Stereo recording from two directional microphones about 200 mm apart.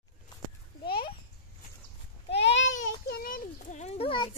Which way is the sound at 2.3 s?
60° left (ahead or behind).